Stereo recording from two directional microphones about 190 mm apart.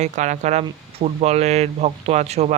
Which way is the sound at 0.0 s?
40° right (ahead or behind).